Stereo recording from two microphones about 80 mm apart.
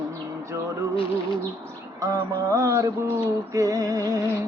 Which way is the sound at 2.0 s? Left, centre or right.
Right.